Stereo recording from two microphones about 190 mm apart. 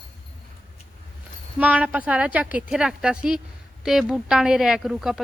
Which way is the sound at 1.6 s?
10° right (ahead or behind).